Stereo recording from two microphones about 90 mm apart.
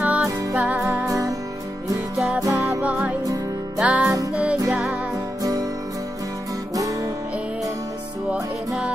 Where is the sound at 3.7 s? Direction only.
15° right (ahead or behind).